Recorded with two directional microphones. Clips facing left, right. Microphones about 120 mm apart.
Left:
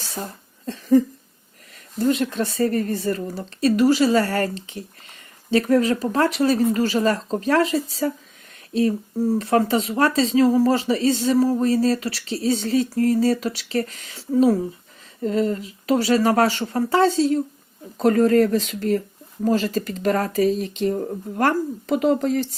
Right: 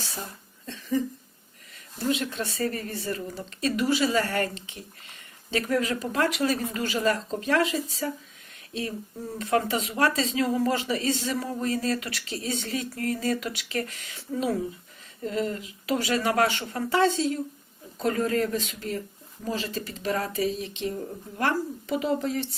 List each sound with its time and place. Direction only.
0.0 s cough: 40° left (ahead or behind)
1.7 s speech: 40° left (ahead or behind)